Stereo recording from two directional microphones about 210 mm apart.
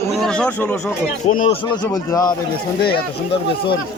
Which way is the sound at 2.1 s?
20° left (ahead or behind).